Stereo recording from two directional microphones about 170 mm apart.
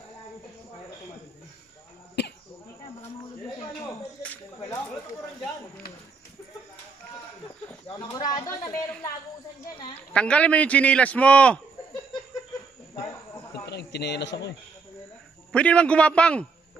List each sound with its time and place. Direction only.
2.2 s a sound: 85° left
4.2 s music: 10° left (ahead or behind)
7.9 s speech: 25° left (ahead or behind)
10.1 s a man's voice: 5° left (ahead or behind)
13.7 s speech: 80° left
15.5 s a man's voice: 5° left (ahead or behind)